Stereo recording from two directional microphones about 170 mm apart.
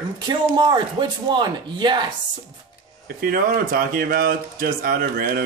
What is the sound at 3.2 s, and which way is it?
Speech, 60° right (ahead or behind).